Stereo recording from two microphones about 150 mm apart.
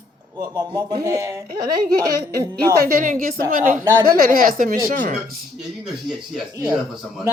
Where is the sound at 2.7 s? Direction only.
85° right; by 5.1 s 65° right (ahead or behind).